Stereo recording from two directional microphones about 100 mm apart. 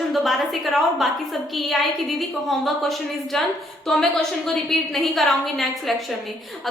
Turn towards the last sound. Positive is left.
turn(degrees=0)  # may be behind; listen again after turning